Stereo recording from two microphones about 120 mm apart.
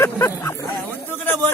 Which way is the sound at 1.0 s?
15° left (ahead or behind).